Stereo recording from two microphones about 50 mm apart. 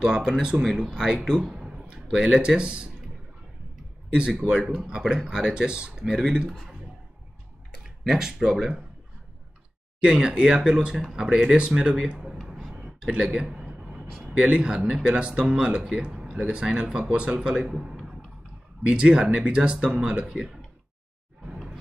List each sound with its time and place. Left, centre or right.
0.0 s speech: centre
4.3 s speech: centre
4.6 s speech: centre
6.0 s speech: centre
7.8 s speech: centre
10.0 s speech: centre
13.2 s a sound: centre
14.2 s speech: right
17.6 s a sound: centre
18.8 s speech: right